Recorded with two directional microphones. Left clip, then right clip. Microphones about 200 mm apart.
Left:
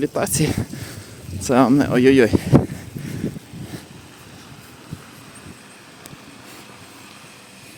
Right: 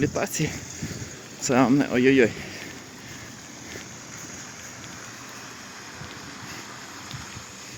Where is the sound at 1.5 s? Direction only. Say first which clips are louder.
Left 5 dB; 25° left (ahead or behind).